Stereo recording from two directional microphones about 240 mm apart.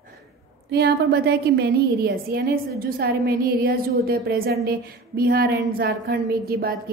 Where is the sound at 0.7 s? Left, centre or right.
Right.